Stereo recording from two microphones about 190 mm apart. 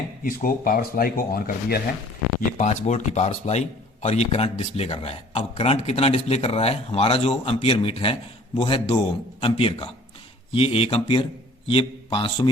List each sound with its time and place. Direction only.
0.3 s speech: 50° left (ahead or behind)
2.6 s speech: 35° left (ahead or behind)